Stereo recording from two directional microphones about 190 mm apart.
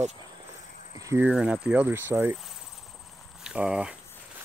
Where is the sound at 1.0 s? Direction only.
10° right (ahead or behind).